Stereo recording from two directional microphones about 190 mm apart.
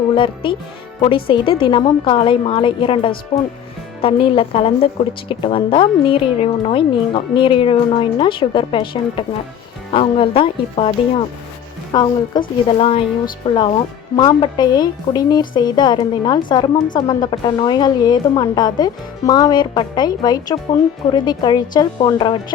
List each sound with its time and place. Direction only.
0.1 s speech: 25° left (ahead or behind)